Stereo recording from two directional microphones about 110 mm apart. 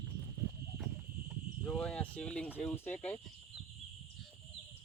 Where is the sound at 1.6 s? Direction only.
10° left (ahead or behind).